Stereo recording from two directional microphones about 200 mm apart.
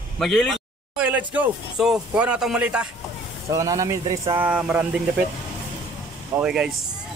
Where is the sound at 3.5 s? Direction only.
15° right (ahead or behind).